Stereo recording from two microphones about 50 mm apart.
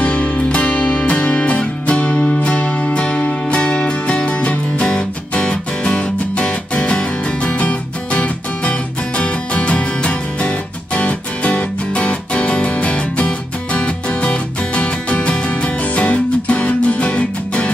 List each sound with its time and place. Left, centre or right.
0.0 s music: left